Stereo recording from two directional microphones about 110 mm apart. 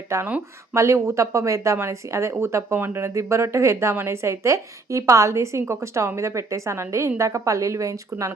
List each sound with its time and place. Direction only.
0.1 s speech: 25° right (ahead or behind)